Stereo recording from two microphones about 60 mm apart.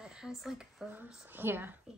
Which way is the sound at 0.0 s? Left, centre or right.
Centre.